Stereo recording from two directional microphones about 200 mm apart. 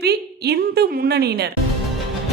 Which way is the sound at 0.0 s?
55° right (ahead or behind).